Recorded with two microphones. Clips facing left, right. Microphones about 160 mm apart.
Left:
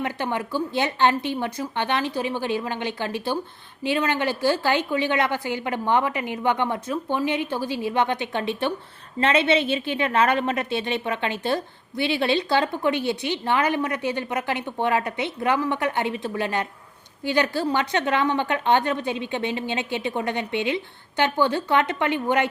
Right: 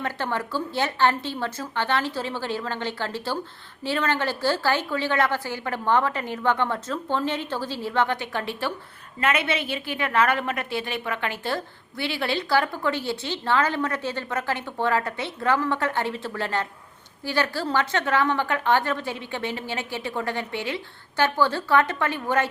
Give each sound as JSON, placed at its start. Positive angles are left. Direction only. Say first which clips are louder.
{"t": 0.0, "sound": "a woman's voice", "louder": "left 2 dB", "side_deg": 15}